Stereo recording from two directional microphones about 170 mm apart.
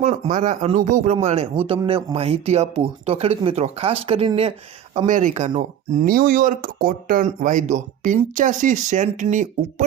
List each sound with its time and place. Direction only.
0.0 s speech: 45° right (ahead or behind)
4.9 s speech: 50° right (ahead or behind)
6.1 s speech: 60° right (ahead or behind)